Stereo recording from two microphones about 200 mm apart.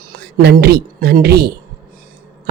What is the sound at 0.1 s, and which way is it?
Speech, 45° right (ahead or behind).